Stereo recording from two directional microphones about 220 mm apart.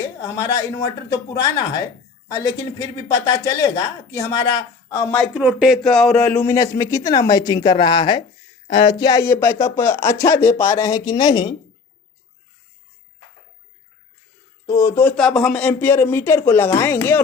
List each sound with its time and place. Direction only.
0.2 s speech: 15° left (ahead or behind)
2.8 s speech: 15° left (ahead or behind)
5.3 s speech: 5° right (ahead or behind); by 8.2 s 20° left (ahead or behind)
8.6 s speech: 30° left (ahead or behind)
8.9 s a woman's voice: 20° left (ahead or behind)
14.7 s speech: 15° left (ahead or behind)